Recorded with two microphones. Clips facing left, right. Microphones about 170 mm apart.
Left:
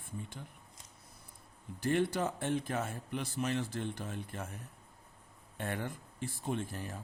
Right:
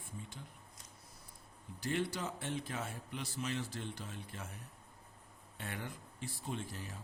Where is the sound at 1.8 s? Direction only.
55° left (ahead or behind).